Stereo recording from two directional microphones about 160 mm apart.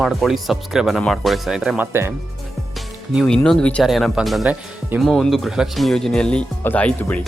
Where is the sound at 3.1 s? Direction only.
5° left (ahead or behind).